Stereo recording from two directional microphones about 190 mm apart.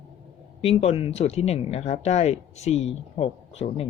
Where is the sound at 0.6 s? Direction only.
35° left (ahead or behind).